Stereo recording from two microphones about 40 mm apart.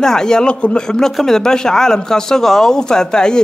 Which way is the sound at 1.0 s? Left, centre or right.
Centre.